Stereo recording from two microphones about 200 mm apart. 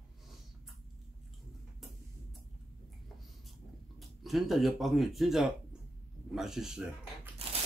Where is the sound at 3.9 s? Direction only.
Centre (ahead or behind).